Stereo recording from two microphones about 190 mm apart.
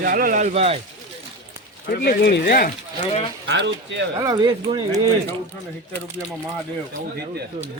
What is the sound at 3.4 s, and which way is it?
Speech, 70° right (ahead or behind).